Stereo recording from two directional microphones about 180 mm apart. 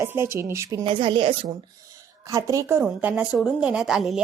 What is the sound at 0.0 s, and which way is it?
Speech, 15° right (ahead or behind).